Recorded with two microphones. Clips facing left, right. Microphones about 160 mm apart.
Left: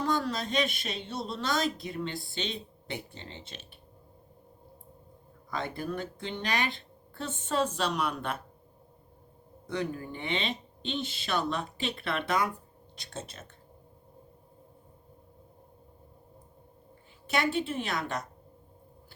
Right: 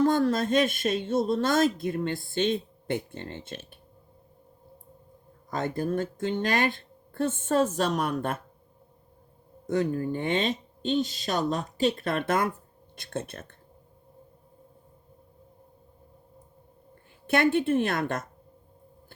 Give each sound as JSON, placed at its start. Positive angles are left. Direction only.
{"t": 0.0, "sound": "speech", "side_deg": -50}
{"t": 5.5, "sound": "speech", "side_deg": -45}
{"t": 9.6, "sound": "speech", "side_deg": -45}
{"t": 17.2, "sound": "speech", "side_deg": -55}